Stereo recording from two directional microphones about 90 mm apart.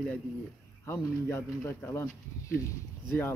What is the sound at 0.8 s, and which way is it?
Speech, 30° left (ahead or behind).